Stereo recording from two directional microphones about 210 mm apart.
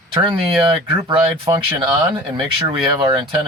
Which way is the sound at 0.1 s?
20° right (ahead or behind).